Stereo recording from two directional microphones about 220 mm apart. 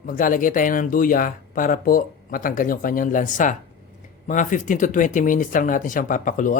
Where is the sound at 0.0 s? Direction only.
40° left (ahead or behind).